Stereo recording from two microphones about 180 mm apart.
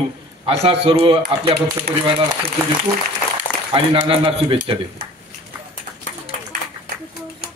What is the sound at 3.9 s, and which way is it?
Speech, 30° right (ahead or behind).